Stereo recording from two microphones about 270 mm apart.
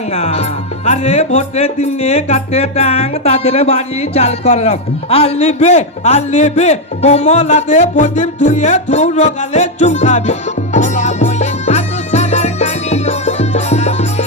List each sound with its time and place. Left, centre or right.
0.1 s speech: left